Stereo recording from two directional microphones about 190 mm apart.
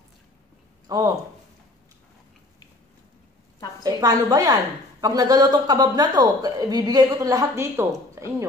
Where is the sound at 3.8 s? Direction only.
20° right (ahead or behind).